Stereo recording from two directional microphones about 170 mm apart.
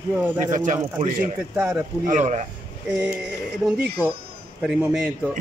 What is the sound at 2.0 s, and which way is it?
Speech, 45° right (ahead or behind).